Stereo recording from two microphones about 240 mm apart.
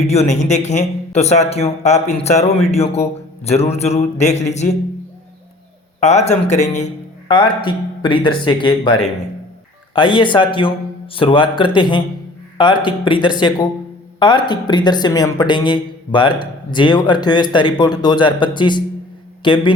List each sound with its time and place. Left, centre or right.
0.0 s a man's voice: left
6.0 s a man's voice: left